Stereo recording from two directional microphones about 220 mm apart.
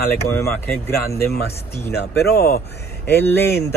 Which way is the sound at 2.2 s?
45° left (ahead or behind).